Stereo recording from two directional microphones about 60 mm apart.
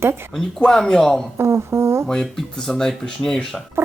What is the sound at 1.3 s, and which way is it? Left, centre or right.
Speech, right.